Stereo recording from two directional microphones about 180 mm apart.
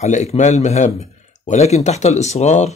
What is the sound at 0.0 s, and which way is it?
Speech, 40° left (ahead or behind).